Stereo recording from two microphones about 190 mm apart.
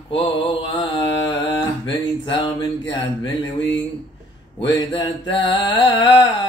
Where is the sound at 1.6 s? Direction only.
25° left (ahead or behind).